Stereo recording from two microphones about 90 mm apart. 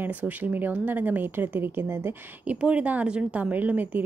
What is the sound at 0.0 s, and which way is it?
Speech, 20° right (ahead or behind).